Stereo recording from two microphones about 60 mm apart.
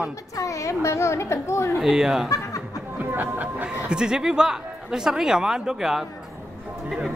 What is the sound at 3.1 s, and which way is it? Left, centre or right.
Speech, right.